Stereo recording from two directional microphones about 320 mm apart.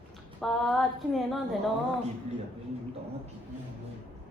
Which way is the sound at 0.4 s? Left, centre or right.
Centre.